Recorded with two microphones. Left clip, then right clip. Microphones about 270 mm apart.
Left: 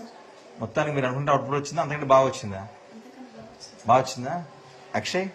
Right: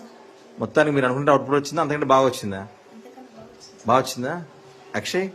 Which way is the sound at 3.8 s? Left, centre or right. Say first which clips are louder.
Right 1 dB; centre.